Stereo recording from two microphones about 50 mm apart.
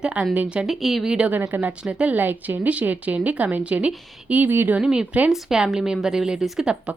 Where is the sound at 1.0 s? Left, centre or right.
Centre.